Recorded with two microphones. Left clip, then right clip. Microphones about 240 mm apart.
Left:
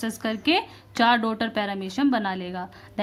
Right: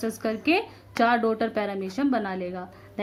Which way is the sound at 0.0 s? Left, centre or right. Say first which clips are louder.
Even; left.